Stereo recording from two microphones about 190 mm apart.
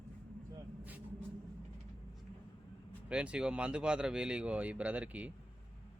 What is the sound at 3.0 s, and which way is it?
Speech, 5° right (ahead or behind).